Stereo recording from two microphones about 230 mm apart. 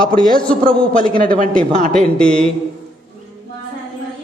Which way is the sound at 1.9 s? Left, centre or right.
Centre.